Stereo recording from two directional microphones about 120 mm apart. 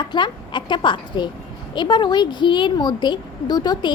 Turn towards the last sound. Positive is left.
turn(degrees=35)  # may be behind; listen again after turning